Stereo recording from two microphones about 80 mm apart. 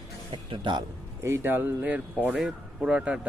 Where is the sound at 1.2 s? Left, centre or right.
Right.